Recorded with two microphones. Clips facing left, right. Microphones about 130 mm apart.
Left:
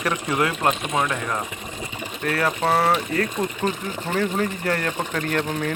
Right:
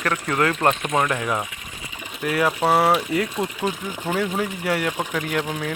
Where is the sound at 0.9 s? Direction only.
5° right (ahead or behind).